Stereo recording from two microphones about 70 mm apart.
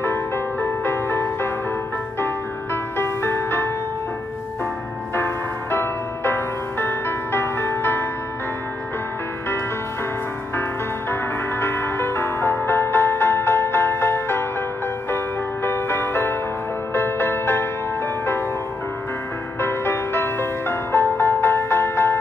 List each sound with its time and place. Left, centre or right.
0.0 s music: left
5.1 s music: left
11.6 s music: left
15.6 s music: left
19.6 s music: left